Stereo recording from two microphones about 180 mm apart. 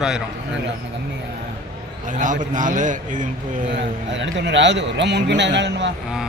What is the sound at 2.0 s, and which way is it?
A man's voice, 45° right (ahead or behind).